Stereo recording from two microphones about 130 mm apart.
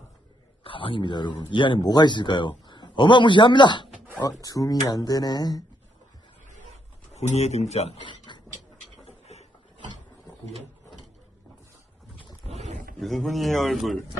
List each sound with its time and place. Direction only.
0.6 s speech: 45° left (ahead or behind)
4.2 s speech: 25° left (ahead or behind)
7.1 s speech: 55° left (ahead or behind)
8.0 s a sound: 35° left (ahead or behind)
9.0 s a sound: 55° left (ahead or behind)
12.5 s wild animals: 55° right (ahead or behind)
13.0 s speech: centre (ahead or behind)